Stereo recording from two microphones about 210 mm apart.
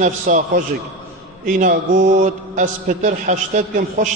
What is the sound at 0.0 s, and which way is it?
A man's voice, 35° right (ahead or behind).